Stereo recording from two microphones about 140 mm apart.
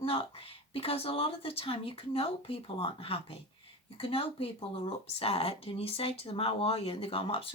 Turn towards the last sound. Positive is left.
turn(degrees=40)  # may be behind; listen again after turning